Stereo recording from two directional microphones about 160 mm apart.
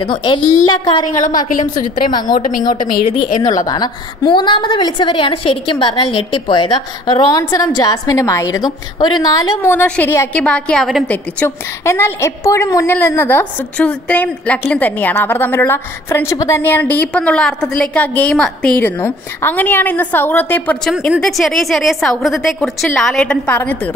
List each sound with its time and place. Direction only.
0.0 s a woman's voice: 30° left (ahead or behind)
1.1 s a woman's voice: 55° left (ahead or behind)
2.0 s a woman's voice: 25° left (ahead or behind)
3.3 s a woman's voice: 55° left (ahead or behind)
3.6 s a woman's voice: 25° left (ahead or behind)
9.7 s a woman's voice: 10° left (ahead or behind)
11.1 s a woman's voice: 10° left (ahead or behind)